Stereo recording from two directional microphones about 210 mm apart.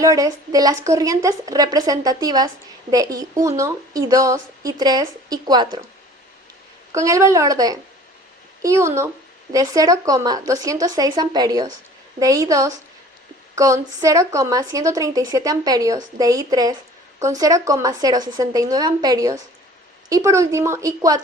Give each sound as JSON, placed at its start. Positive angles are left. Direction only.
{"t": 0.0, "sound": "a woman's voice", "side_deg": -15}
{"t": 6.9, "sound": "a woman's voice", "side_deg": -15}